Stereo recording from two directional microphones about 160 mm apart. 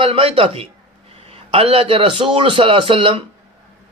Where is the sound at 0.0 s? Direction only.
35° right (ahead or behind).